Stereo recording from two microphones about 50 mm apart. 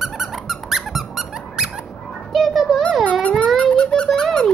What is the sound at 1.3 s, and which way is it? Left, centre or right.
Squeak, centre.